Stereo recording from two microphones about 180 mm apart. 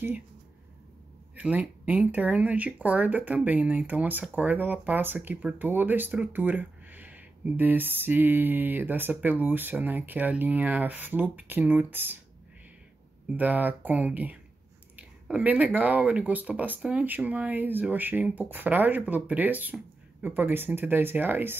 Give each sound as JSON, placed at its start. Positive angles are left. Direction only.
{"t": 1.3, "sound": "speech", "side_deg": -10}
{"t": 13.3, "sound": "speech", "side_deg": -10}